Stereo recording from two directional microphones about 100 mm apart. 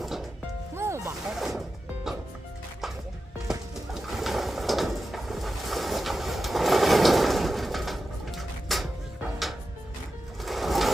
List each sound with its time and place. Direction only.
0.0 s music: centre (ahead or behind)
0.8 s music: 30° right (ahead or behind)
1.3 s music: 5° right (ahead or behind)
3.9 s a sound: centre (ahead or behind)
10.4 s sewing machine: centre (ahead or behind)